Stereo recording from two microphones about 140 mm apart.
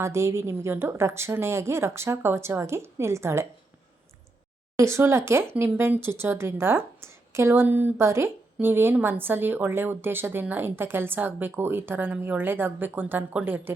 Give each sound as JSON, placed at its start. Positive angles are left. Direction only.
{"t": 0.0, "sound": "a woman's voice", "side_deg": -20}
{"t": 4.8, "sound": "a woman's voice", "side_deg": -20}